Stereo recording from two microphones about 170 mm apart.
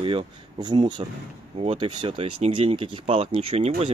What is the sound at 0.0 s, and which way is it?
Speech, 30° right (ahead or behind).